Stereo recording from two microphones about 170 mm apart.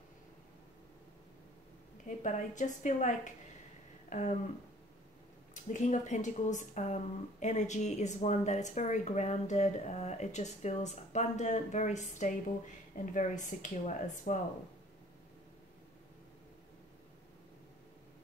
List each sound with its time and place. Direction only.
2.0 s speech: 45° left (ahead or behind)
5.5 s speech: 45° left (ahead or behind)